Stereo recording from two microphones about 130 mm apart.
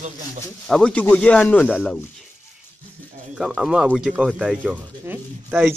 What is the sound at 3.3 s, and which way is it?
Speech, 5° right (ahead or behind).